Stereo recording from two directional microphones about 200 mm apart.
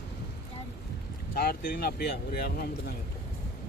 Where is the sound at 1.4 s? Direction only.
50° left (ahead or behind).